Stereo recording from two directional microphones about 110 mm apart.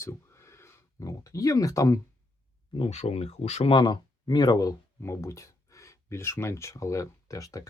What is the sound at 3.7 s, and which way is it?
Speech, 40° left (ahead or behind).